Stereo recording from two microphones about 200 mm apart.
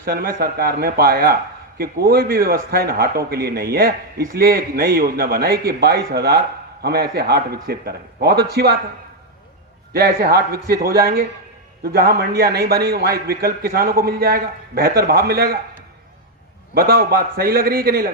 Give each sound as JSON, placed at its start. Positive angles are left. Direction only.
{"t": 0.0, "sound": "a man's voice", "side_deg": -45}
{"t": 9.9, "sound": "a man's voice", "side_deg": -50}
{"t": 16.7, "sound": "a man's voice", "side_deg": -50}